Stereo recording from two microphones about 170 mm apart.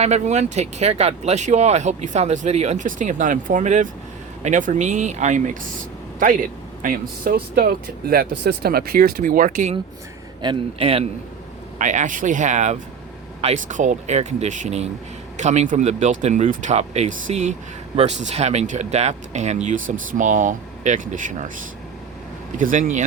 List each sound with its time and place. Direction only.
0.0 s speech: 40° right (ahead or behind)
10.4 s speech: 30° right (ahead or behind)
11.8 s speech: 45° right (ahead or behind)
22.5 s speech: 50° right (ahead or behind)